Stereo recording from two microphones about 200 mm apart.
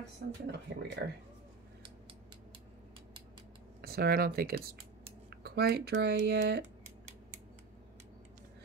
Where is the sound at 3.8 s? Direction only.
50° right (ahead or behind).